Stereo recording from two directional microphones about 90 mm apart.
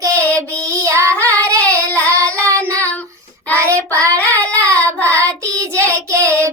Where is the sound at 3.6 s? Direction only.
35° right (ahead or behind).